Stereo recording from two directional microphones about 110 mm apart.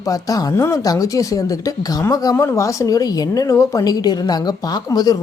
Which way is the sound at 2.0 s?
30° left (ahead or behind).